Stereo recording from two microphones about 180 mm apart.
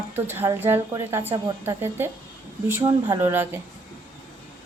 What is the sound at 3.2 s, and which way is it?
Speech, 10° right (ahead or behind).